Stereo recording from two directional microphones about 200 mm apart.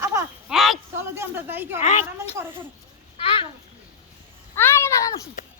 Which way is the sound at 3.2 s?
25° left (ahead or behind).